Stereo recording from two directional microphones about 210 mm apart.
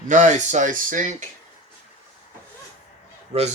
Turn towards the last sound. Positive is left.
turn(degrees=-30)  # may be behind; listen again after turning